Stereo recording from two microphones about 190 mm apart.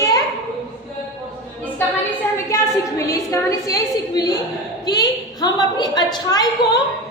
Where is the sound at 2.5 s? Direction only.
15° left (ahead or behind).